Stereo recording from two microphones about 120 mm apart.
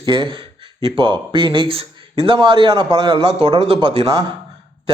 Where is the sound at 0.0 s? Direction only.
40° right (ahead or behind).